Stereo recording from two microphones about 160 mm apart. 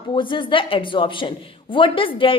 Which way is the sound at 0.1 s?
30° left (ahead or behind).